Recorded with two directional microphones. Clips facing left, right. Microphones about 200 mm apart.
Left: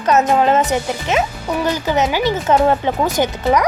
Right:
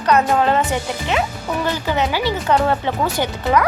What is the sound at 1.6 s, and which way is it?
A woman's voice, 15° left (ahead or behind).